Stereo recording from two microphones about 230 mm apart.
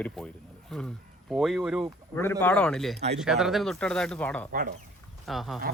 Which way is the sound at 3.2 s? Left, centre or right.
Centre.